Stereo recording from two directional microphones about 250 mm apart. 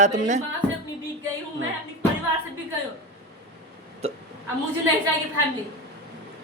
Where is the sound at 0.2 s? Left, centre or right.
Right.